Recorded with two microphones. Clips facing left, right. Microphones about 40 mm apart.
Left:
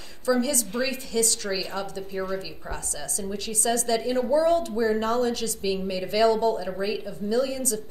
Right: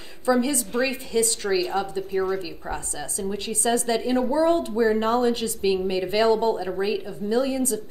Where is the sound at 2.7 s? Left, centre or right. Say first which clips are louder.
Right 1 dB; right.